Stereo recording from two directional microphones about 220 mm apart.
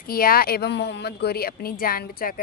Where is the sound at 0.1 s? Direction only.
40° left (ahead or behind).